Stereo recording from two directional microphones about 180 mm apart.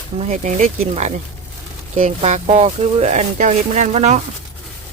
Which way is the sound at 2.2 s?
35° right (ahead or behind).